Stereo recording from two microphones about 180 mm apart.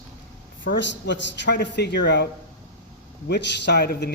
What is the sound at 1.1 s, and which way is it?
Speech, 75° left (ahead or behind).